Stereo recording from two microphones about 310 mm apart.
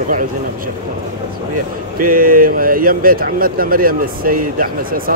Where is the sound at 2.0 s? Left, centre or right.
Right.